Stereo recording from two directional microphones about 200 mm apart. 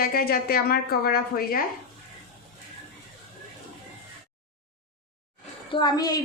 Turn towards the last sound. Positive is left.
turn(degrees=20)  # may be behind; listen again after turning